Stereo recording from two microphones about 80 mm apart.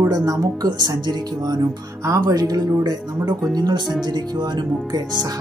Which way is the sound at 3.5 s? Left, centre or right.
Right.